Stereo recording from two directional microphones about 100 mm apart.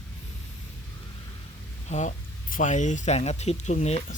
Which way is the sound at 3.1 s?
90° left.